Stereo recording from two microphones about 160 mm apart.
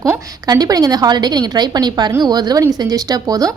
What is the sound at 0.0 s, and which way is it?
A woman's voice, 20° right (ahead or behind).